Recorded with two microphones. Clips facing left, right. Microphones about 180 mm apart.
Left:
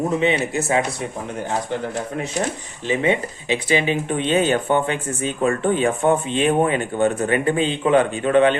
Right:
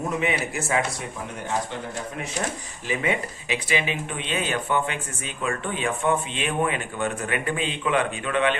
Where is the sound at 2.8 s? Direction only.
25° left (ahead or behind).